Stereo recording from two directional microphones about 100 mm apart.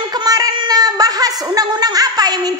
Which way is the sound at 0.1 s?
40° right (ahead or behind).